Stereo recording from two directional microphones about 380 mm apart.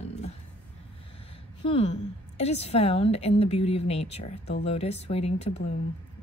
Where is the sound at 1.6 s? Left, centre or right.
Centre.